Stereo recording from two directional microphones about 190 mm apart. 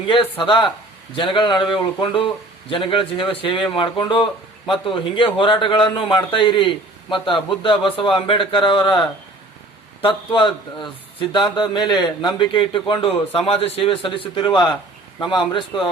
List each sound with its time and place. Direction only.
0.1 s speech: 25° left (ahead or behind)